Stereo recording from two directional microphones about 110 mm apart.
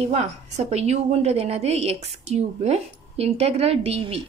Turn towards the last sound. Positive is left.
turn(degrees=-65)  # may be behind; listen again after turning